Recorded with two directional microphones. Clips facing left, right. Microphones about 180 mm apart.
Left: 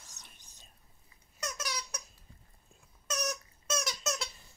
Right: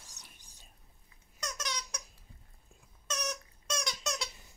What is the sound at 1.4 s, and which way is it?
Squeak, 10° left (ahead or behind).